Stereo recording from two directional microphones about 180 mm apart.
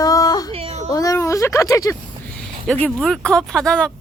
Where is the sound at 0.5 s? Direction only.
35° right (ahead or behind).